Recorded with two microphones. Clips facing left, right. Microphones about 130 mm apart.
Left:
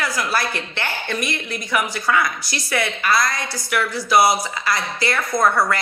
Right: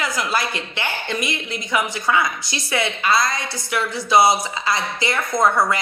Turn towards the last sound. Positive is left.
turn(degrees=-20)  # may be behind; listen again after turning